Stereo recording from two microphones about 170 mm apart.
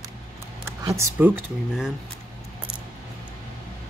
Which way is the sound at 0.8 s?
15° right (ahead or behind).